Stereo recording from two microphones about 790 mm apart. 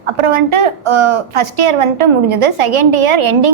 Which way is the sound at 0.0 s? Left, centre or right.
Right.